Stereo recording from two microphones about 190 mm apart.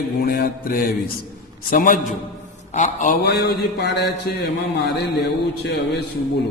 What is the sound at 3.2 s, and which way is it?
A man's voice, 60° left (ahead or behind).